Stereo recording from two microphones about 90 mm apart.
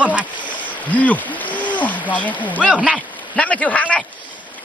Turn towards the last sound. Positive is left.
turn(degrees=15)  # may be behind; listen again after turning